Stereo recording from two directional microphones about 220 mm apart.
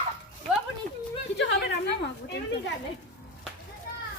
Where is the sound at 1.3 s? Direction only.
50° left (ahead or behind).